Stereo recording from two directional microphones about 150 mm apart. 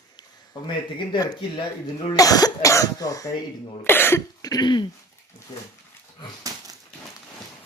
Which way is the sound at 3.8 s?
15° left (ahead or behind).